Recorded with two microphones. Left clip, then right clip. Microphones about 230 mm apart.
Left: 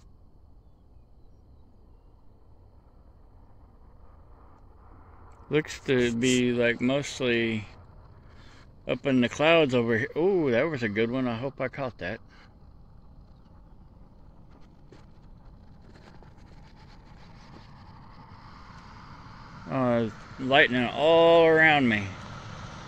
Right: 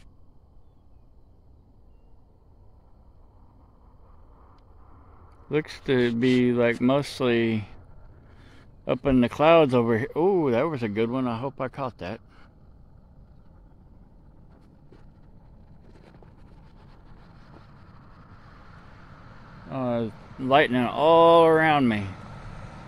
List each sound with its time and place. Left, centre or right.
5.5 s speech: centre; by 7.8 s right
8.8 s speech: centre
19.7 s vehicle: centre
20.4 s speech: right
22.4 s vehicle: right